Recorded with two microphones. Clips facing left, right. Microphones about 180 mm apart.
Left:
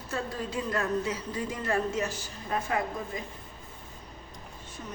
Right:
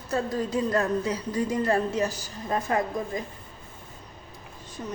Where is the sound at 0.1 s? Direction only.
40° right (ahead or behind).